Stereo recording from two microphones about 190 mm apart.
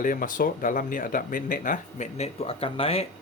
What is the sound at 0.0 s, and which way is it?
Speech, 45° left (ahead or behind).